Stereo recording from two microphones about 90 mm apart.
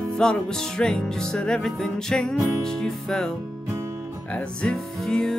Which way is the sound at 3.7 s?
30° right (ahead or behind).